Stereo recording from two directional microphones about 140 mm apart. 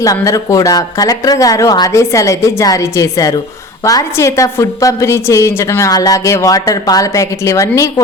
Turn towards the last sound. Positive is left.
turn(degrees=25)  # may be behind; listen again after turning